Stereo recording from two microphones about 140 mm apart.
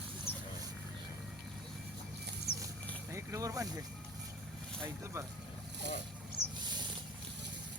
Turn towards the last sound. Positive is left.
turn(degrees=-30)  # may be behind; listen again after turning